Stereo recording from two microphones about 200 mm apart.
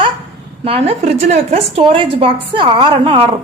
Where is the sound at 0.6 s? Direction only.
30° right (ahead or behind).